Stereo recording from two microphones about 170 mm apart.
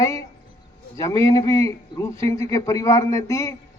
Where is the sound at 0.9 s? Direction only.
20° left (ahead or behind).